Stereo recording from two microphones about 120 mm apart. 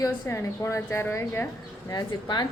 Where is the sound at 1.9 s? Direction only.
35° left (ahead or behind).